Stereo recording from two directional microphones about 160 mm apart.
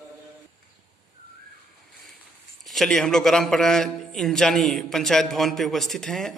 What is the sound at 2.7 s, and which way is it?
A man's voice, centre (ahead or behind).